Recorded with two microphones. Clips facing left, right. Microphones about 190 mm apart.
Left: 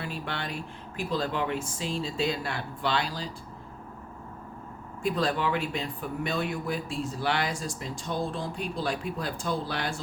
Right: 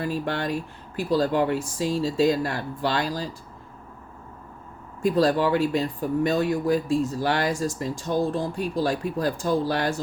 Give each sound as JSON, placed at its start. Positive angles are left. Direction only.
{"t": 0.0, "sound": "speech", "side_deg": -45}
{"t": 5.0, "sound": "speech", "side_deg": -40}